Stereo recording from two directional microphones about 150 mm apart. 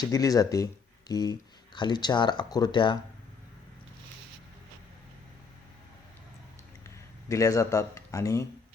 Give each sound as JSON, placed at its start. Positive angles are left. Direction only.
{"t": 0.0, "sound": "speech", "side_deg": 25}
{"t": 7.3, "sound": "speech", "side_deg": 20}